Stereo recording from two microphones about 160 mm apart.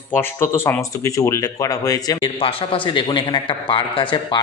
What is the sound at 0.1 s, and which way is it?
A man's voice, 15° left (ahead or behind).